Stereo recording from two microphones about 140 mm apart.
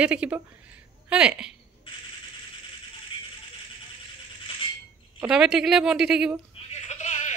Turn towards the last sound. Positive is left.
turn(degrees=55)  # may be behind; listen again after turning